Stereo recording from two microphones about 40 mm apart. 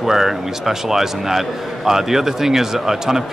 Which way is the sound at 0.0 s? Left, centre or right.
Centre.